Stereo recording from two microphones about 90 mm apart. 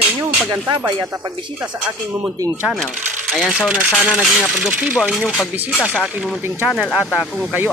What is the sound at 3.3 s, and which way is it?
Speech, centre (ahead or behind).